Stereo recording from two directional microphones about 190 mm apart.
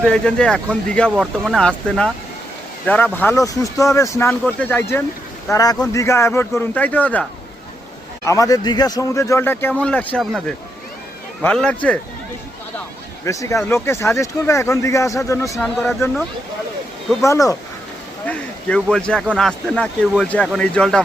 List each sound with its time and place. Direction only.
0.0 s a man's voice: 5° left (ahead or behind)
13.2 s a man's voice: 15° left (ahead or behind)
15.6 s speech: centre (ahead or behind)
17.2 s a man's voice: 15° left (ahead or behind)
18.3 s speech: 5° left (ahead or behind)